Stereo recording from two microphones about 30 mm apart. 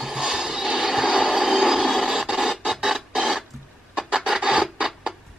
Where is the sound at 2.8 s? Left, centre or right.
Centre.